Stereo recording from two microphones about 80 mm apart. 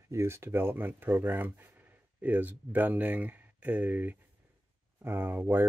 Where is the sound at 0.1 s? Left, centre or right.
Right.